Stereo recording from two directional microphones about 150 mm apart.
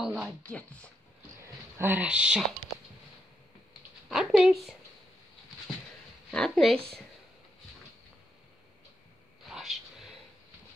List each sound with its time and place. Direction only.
0.0 s speech: 5° right (ahead or behind)
0.4 s speech: 10° left (ahead or behind)
1.8 s speech: 10° right (ahead or behind)
4.1 s speech: centre (ahead or behind)
6.3 s speech: 5° left (ahead or behind)
9.5 s a sound: centre (ahead or behind)